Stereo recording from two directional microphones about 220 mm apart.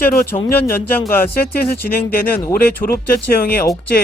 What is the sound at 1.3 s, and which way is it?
Speech, 45° left (ahead or behind).